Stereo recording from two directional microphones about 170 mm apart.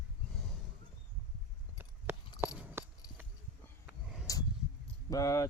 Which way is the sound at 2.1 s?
15° right (ahead or behind).